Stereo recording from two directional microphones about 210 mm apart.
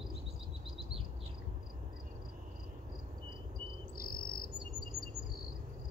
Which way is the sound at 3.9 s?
45° left (ahead or behind).